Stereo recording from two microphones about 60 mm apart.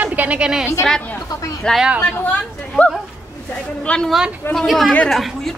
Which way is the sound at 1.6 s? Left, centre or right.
Centre.